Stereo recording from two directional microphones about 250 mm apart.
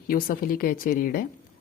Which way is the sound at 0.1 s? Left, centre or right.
Left.